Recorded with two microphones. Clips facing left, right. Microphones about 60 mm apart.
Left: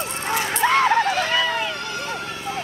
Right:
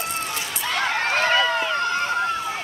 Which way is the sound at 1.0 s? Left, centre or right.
Right.